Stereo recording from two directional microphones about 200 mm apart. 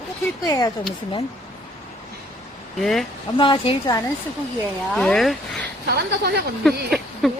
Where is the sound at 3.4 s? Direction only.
25° left (ahead or behind).